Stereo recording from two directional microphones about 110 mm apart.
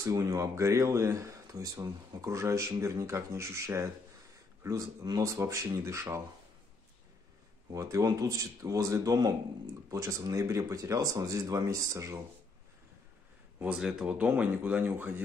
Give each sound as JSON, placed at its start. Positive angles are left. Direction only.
{"t": 0.0, "sound": "speech", "side_deg": -30}
{"t": 7.7, "sound": "speech", "side_deg": -30}
{"t": 13.7, "sound": "speech", "side_deg": -5}